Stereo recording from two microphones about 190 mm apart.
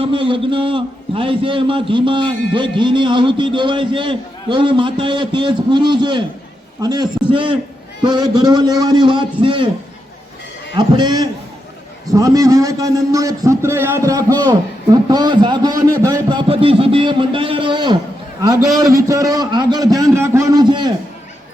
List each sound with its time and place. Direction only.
0.0 s a man's voice: 25° right (ahead or behind)
10.8 s a man's voice: 25° right (ahead or behind)